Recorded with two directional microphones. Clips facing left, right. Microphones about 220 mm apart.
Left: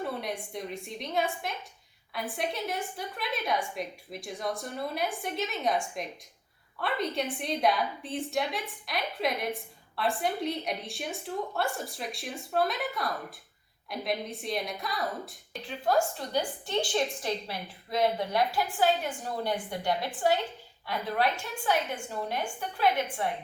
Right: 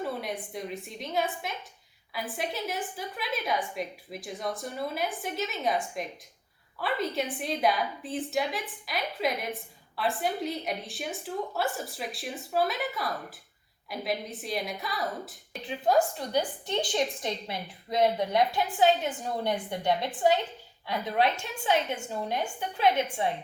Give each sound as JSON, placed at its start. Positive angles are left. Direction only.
{"t": 0.0, "sound": "a woman's voice", "side_deg": 0}
{"t": 15.6, "sound": "a woman's voice", "side_deg": -15}